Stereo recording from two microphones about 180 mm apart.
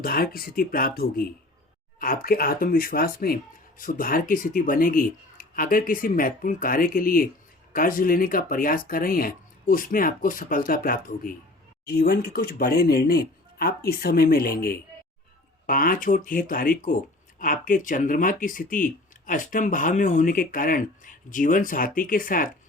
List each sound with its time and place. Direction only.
0.0 s speech: 55° left (ahead or behind)